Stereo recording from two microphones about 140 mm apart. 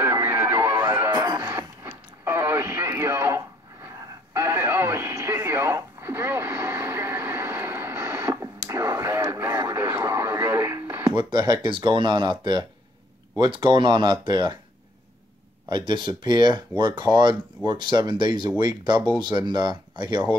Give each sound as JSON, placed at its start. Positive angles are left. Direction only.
{"t": 0.0, "sound": "music", "side_deg": -15}
{"t": 1.2, "sound": "radio", "side_deg": -25}
{"t": 11.1, "sound": "speech", "side_deg": -35}
{"t": 15.7, "sound": "speech", "side_deg": -35}